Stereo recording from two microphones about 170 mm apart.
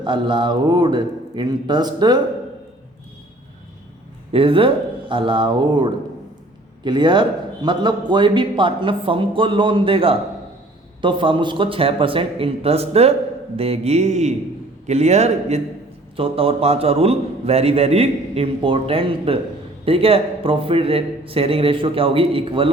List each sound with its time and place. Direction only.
0.0 s a man's voice: 30° right (ahead or behind)
4.3 s a man's voice: 30° right (ahead or behind)